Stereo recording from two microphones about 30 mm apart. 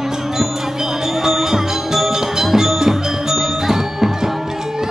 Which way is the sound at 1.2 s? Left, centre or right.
Centre.